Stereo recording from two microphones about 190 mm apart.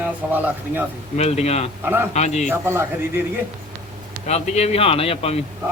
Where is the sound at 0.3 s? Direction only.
10° right (ahead or behind).